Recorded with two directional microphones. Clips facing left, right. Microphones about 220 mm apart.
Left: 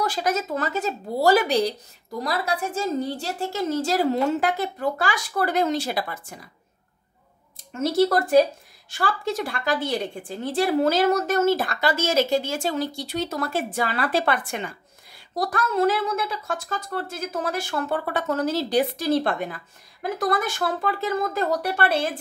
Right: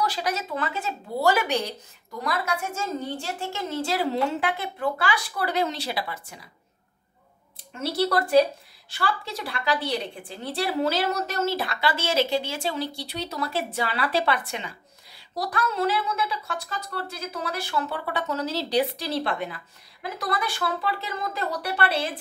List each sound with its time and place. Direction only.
0.0 s a woman's voice: 45° left (ahead or behind)
7.5 s a woman's voice: 45° left (ahead or behind)